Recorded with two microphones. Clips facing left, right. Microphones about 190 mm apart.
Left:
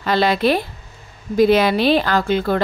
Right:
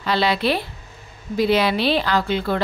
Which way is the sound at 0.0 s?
45° left (ahead or behind).